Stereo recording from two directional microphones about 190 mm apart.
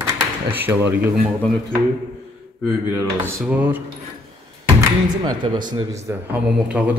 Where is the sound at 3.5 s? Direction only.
10° right (ahead or behind).